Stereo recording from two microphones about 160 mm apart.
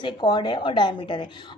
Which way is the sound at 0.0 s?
30° left (ahead or behind).